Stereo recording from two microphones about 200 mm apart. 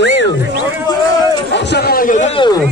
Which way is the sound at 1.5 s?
60° left (ahead or behind).